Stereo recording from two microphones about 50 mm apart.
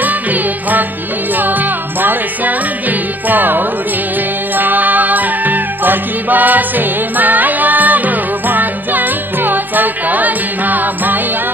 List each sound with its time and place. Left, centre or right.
0.0 s music: right